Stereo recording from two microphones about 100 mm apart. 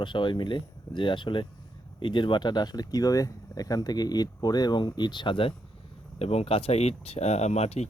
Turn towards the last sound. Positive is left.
turn(degrees=90)